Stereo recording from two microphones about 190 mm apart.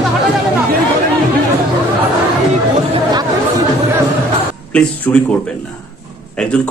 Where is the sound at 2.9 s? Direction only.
20° right (ahead or behind).